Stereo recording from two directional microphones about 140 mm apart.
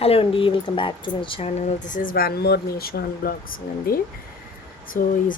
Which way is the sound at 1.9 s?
85° left.